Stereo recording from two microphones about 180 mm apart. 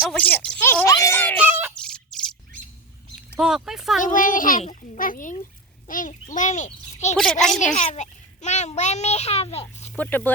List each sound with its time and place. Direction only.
0.0 s speech: 5° left (ahead or behind)
1.4 s a sound: 10° right (ahead or behind)
1.7 s a sound: 5° left (ahead or behind)
3.3 s speech: 5° right (ahead or behind)
4.0 s a child's voice: 45° left (ahead or behind)
9.9 s speech: 10° left (ahead or behind)